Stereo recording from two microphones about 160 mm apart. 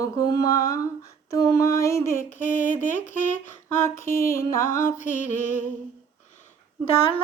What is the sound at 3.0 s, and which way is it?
Speech, 15° left (ahead or behind).